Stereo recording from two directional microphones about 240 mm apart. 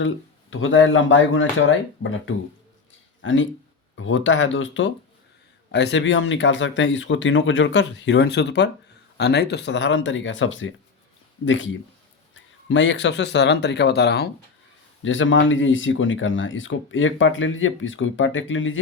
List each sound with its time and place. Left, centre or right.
0.5 s speech: left